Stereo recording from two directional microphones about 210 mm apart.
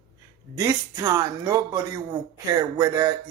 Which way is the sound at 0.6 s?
15° right (ahead or behind).